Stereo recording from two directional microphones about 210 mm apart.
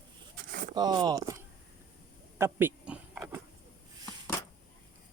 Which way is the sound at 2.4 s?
10° right (ahead or behind).